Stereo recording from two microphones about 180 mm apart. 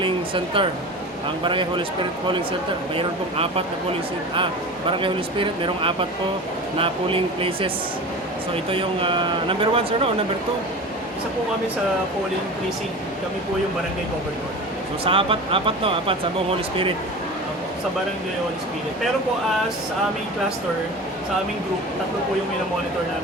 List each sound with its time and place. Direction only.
0.0 s a sound: 30° right (ahead or behind)
1.5 s speech: 25° right (ahead or behind)
4.9 s speech: 30° right (ahead or behind)
8.7 s speech: 30° right (ahead or behind)
15.0 s speech: 30° right (ahead or behind)